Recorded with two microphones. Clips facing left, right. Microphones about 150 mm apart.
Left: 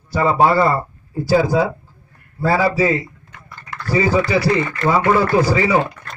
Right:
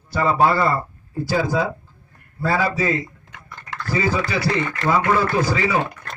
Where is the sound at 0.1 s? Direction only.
25° left (ahead or behind).